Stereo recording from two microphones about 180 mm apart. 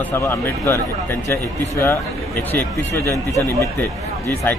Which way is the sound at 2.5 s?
10° left (ahead or behind).